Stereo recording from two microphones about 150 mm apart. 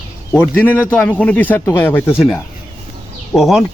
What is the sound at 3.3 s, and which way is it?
Speech, 15° left (ahead or behind).